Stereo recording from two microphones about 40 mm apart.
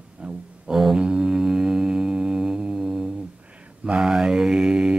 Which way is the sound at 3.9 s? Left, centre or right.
Centre.